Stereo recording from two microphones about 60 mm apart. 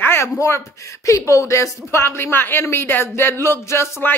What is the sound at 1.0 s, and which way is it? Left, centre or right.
Speech, left.